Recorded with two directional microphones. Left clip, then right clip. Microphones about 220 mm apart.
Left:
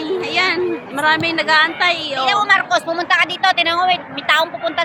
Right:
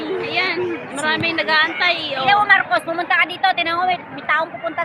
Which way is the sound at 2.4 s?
50° left (ahead or behind).